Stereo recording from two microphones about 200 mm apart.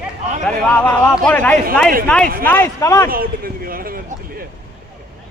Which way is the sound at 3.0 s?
45° right (ahead or behind).